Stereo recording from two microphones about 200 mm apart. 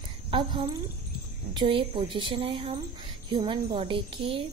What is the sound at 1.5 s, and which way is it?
A woman's voice, 25° right (ahead or behind).